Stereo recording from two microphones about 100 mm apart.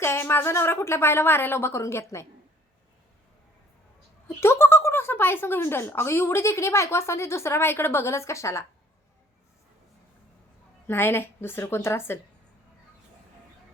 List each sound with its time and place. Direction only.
0.0 s speech: 25° left (ahead or behind)
4.4 s speech: 25° left (ahead or behind)
10.8 s speech: 25° left (ahead or behind)